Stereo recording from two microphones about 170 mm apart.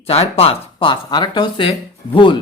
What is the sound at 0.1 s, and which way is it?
Speech, 35° left (ahead or behind).